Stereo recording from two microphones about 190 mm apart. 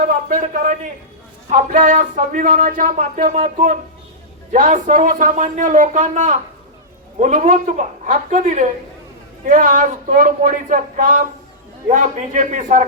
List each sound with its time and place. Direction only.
0.3 s a woman's voice: 40° right (ahead or behind)